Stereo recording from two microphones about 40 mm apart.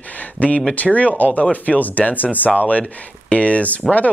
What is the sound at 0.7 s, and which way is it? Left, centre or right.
Speech, left.